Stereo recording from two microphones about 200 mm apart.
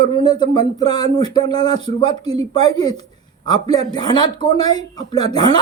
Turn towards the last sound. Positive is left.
turn(degrees=20)  # may be behind; listen again after turning